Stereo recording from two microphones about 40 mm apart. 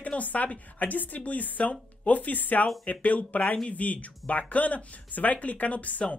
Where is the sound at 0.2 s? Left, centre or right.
Left.